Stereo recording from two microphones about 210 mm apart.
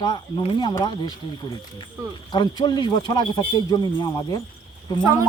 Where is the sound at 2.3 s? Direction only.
20° left (ahead or behind).